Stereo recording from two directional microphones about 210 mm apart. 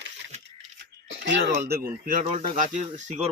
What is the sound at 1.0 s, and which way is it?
Speech, 60° right (ahead or behind).